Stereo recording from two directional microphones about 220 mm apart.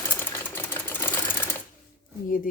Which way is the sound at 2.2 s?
40° left (ahead or behind).